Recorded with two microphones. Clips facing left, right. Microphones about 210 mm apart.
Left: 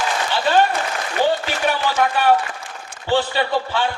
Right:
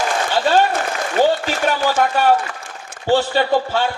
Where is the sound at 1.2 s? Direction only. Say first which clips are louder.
Right 3 dB; 45° right (ahead or behind).